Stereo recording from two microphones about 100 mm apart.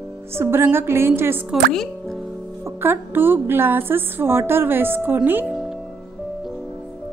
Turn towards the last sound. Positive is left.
turn(degrees=-20)  # may be behind; listen again after turning